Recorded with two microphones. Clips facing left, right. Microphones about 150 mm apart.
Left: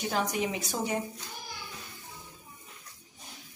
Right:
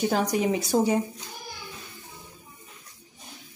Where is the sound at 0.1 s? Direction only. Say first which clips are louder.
Right 6 dB; 35° right (ahead or behind).